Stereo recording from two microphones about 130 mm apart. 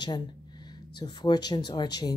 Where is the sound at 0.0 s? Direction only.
35° left (ahead or behind).